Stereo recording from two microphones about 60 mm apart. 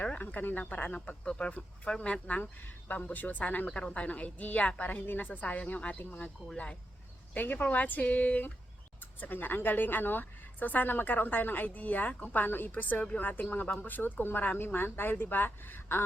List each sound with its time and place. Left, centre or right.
0.0 s speech: left
3.7 s speech: centre
7.3 s speech: left